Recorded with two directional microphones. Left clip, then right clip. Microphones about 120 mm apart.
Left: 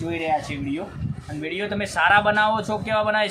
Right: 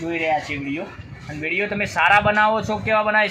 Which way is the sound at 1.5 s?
30° right (ahead or behind).